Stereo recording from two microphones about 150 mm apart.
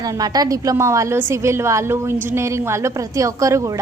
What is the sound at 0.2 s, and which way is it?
A woman's voice, 25° right (ahead or behind).